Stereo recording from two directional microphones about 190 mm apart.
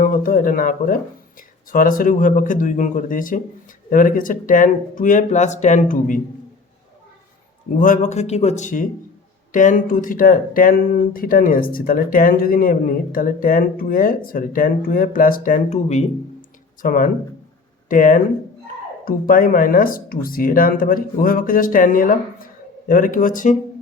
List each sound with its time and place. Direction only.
0.0 s speech: 45° left (ahead or behind)
7.8 s a man's voice: 40° left (ahead or behind)